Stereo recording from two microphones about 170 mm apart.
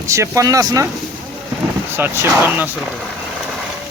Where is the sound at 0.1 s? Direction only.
20° right (ahead or behind).